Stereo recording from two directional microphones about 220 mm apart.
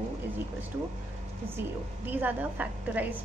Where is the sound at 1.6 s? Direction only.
10° right (ahead or behind).